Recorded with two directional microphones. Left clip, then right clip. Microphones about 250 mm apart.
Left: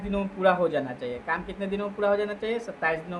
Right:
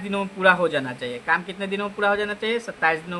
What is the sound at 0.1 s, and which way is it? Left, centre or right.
Speech, right.